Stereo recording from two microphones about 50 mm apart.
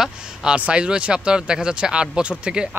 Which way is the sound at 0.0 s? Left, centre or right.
Centre.